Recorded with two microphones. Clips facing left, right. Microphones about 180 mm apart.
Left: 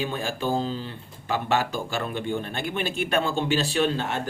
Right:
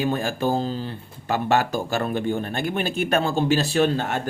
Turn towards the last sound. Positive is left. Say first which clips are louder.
# right 3 dB
turn(degrees=-45)  # may be behind; listen again after turning